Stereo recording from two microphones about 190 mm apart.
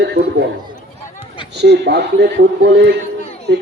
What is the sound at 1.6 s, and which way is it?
Speech, 60° right (ahead or behind).